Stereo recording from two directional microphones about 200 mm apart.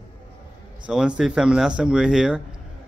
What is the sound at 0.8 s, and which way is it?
A man's voice, 5° right (ahead or behind).